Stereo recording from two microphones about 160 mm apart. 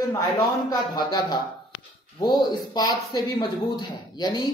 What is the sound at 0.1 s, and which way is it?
Speech, 20° left (ahead or behind).